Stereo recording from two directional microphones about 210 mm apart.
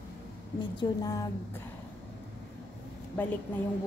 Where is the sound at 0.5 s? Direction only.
20° left (ahead or behind).